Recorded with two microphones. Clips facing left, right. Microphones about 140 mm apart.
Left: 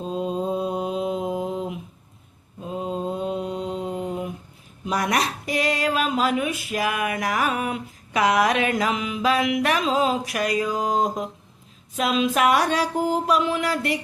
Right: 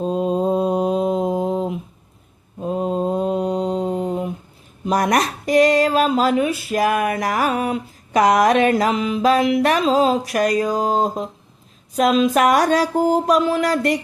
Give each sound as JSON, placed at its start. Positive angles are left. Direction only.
{"t": 0.0, "sound": "mantra", "side_deg": -45}
{"t": 2.6, "sound": "mantra", "side_deg": -50}
{"t": 4.9, "sound": "speech", "side_deg": -45}
{"t": 11.9, "sound": "speech", "side_deg": -40}